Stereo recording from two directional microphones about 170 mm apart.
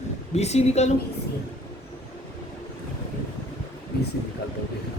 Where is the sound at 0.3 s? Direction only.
40° left (ahead or behind).